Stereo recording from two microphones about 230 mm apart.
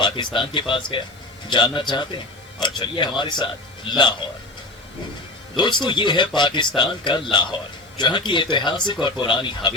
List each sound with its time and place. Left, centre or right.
0.3 s speech: left
5.5 s speech: centre